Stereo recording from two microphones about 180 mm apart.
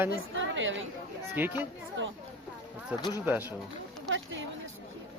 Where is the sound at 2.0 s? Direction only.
90° right.